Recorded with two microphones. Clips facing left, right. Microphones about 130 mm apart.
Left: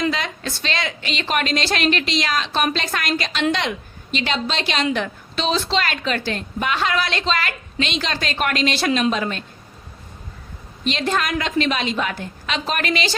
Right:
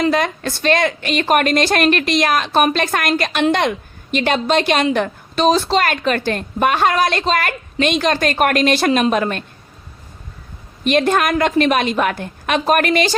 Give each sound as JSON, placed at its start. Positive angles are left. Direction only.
{"t": 0.1, "sound": "a woman's voice", "side_deg": -50}
{"t": 10.8, "sound": "a woman's voice", "side_deg": -55}